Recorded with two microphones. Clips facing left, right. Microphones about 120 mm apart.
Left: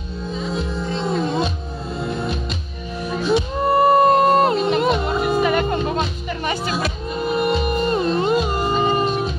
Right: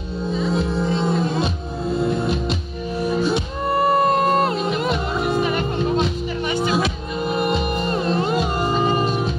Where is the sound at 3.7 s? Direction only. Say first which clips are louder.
Left 4 dB; 25° left (ahead or behind).